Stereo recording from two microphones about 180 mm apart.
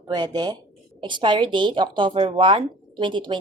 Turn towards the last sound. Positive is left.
turn(degrees=-25)  # may be behind; listen again after turning